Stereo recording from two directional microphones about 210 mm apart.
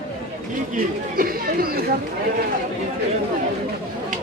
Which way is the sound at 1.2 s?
45° right (ahead or behind).